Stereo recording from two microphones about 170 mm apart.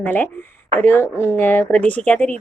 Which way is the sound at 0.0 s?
10° left (ahead or behind).